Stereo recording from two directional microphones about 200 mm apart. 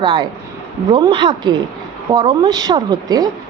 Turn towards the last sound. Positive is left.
turn(degrees=-20)  # may be behind; listen again after turning